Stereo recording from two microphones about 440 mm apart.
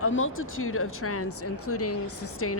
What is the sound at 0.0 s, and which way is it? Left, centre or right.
A woman's voice, left.